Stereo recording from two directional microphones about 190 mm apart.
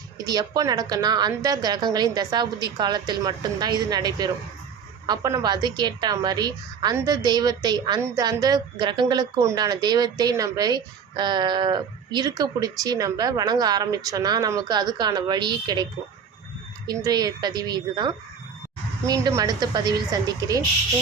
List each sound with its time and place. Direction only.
0.3 s a woman's voice: 20° right (ahead or behind)